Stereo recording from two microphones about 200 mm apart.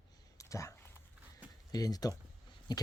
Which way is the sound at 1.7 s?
20° left (ahead or behind).